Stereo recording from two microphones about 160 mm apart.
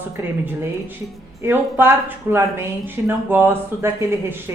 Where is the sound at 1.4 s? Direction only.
15° right (ahead or behind).